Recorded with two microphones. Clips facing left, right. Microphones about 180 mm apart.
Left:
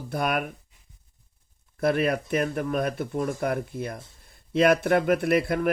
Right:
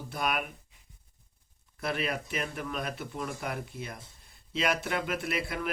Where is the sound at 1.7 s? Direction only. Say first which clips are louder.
Left 9 dB; 50° left (ahead or behind).